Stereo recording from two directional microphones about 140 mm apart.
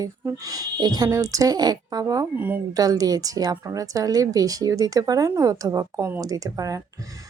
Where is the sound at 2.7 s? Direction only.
25° right (ahead or behind).